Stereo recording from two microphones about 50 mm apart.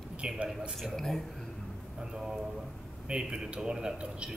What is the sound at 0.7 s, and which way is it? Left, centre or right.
Speech, centre.